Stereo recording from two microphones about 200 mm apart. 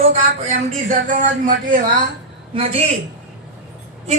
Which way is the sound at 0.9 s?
45° right (ahead or behind).